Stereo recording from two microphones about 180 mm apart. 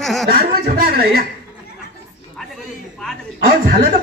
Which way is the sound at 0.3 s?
55° right (ahead or behind).